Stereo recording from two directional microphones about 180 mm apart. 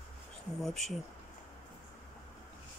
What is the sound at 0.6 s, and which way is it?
Speech, centre (ahead or behind).